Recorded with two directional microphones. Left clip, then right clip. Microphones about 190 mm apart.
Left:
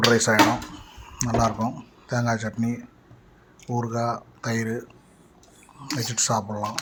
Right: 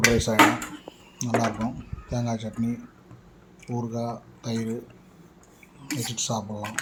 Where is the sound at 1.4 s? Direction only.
25° left (ahead or behind).